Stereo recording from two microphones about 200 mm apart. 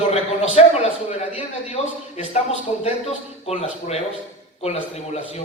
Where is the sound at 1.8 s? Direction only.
30° left (ahead or behind).